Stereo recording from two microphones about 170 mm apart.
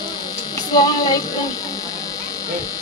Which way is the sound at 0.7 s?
25° left (ahead or behind).